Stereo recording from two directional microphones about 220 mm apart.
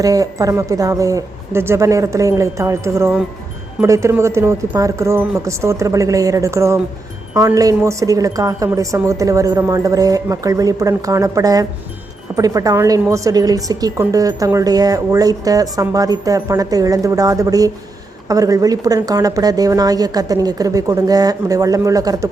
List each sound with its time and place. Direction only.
0.0 s a woman's voice: 15° right (ahead or behind)